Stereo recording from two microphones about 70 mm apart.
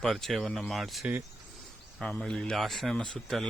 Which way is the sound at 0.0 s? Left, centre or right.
Centre.